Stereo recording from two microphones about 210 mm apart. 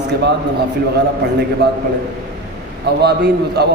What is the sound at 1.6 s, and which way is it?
Speech, 50° right (ahead or behind).